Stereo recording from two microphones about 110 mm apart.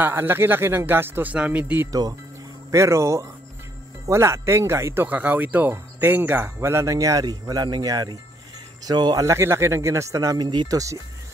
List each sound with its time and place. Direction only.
0.0 s speech: 20° right (ahead or behind)
1.9 s speech: 35° right (ahead or behind)